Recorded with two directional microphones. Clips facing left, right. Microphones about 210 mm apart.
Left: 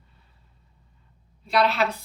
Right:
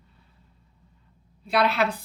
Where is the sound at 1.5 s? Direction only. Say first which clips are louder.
Left 1 dB; 55° right (ahead or behind).